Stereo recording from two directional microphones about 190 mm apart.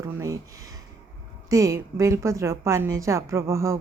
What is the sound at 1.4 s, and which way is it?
A woman's voice, 15° right (ahead or behind).